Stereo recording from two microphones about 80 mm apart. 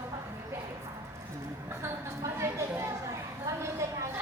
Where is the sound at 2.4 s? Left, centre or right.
Right.